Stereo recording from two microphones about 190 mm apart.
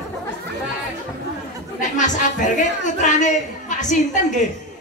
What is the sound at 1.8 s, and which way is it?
Speech, 40° left (ahead or behind).